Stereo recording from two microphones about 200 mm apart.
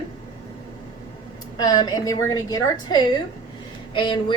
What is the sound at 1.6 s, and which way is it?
A woman's voice, 20° left (ahead or behind).